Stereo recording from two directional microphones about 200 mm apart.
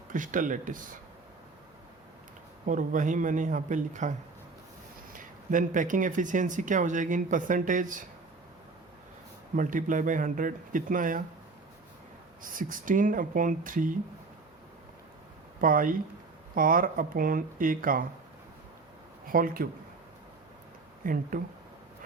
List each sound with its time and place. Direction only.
0.1 s speech: 40° right (ahead or behind)
2.6 s speech: 40° right (ahead or behind)
5.1 s speech: 40° right (ahead or behind)
9.6 s speech: 40° right (ahead or behind)
12.4 s speech: 45° right (ahead or behind)
15.6 s speech: 45° right (ahead or behind)
19.3 s speech: 45° right (ahead or behind)
21.0 s speech: 45° right (ahead or behind)